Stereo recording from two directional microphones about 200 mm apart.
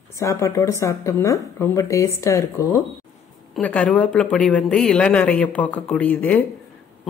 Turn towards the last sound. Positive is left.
turn(degrees=10)  # may be behind; listen again after turning